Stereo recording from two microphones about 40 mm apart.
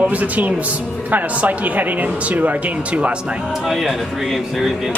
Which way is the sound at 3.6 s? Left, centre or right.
Centre.